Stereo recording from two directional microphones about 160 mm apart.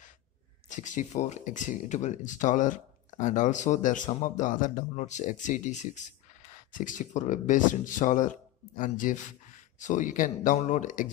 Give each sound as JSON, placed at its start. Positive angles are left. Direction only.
{"t": 0.7, "sound": "speech", "side_deg": 50}